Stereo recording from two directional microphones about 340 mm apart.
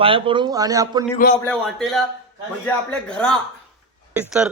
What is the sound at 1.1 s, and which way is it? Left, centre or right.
Speech, left.